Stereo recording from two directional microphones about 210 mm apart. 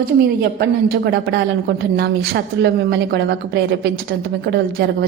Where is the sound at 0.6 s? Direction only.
50° right (ahead or behind).